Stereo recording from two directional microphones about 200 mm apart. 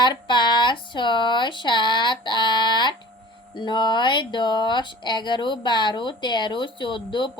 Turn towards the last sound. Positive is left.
turn(degrees=25)  # may be behind; listen again after turning